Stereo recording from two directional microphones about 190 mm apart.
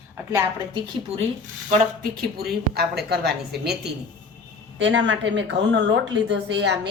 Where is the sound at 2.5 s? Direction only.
60° right (ahead or behind).